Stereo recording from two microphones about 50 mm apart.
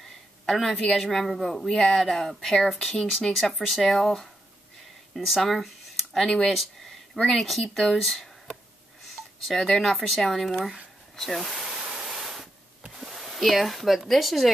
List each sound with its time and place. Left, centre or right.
0.5 s speech: centre
6.1 s speech: centre
7.2 s speech: centre
9.0 s a sound: centre
9.6 s speech: centre
11.7 s a sound: centre
12.1 s static: centre
12.9 s speech: centre